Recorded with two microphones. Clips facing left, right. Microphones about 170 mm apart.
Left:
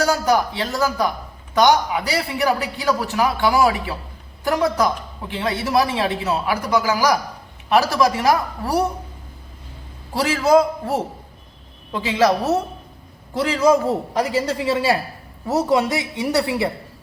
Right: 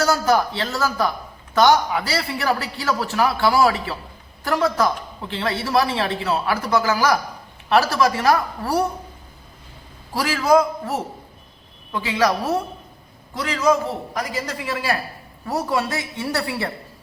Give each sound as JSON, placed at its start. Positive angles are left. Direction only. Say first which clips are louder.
{"t": 0.0, "sound": "a man's voice", "louder": "even", "side_deg": 15}
{"t": 10.2, "sound": "a man's voice", "louder": "left 2 dB", "side_deg": 25}